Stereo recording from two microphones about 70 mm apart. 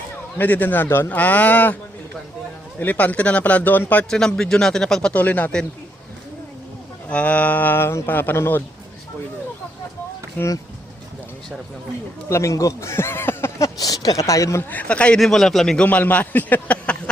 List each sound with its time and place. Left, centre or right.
0.3 s speech: left
1.1 s speech: left
4.1 s speech: centre
5.1 s speech: left
7.1 s speech: centre
10.4 s speech: left
12.3 s speech: left
13.7 s speech: left
14.7 s speech: centre
15.2 s a man's voice: centre
15.8 s speech: left